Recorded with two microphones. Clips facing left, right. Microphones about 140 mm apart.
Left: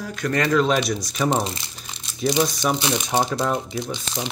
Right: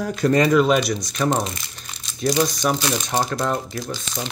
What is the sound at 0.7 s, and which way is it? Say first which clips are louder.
Speech: right 2 dB; centre (ahead or behind).